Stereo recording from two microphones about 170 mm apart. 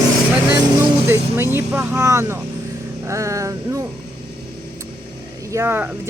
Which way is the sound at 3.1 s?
20° right (ahead or behind).